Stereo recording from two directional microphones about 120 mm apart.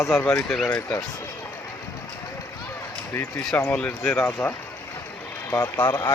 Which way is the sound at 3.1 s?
15° left (ahead or behind).